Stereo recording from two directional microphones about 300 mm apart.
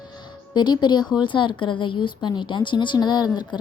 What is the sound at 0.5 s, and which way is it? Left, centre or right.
Speech, centre.